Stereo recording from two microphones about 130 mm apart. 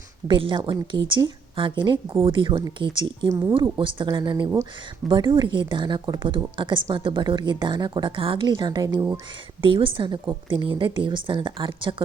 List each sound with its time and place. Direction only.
0.3 s a woman's voice: 40° right (ahead or behind)
9.6 s a woman's voice: 40° right (ahead or behind)